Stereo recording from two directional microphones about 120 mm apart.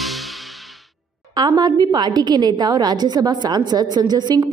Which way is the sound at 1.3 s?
35° right (ahead or behind).